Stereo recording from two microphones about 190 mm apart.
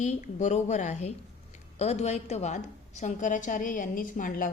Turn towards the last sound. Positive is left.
turn(degrees=45)  # may be behind; listen again after turning